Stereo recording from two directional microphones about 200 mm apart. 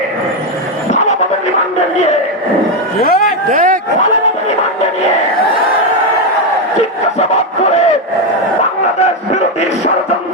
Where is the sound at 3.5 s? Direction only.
40° right (ahead or behind).